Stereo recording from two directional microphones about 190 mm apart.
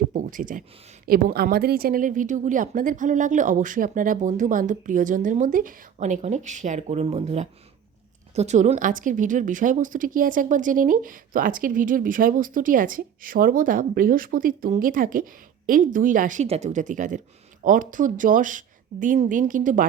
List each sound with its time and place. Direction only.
0.1 s a woman's voice: 45° right (ahead or behind)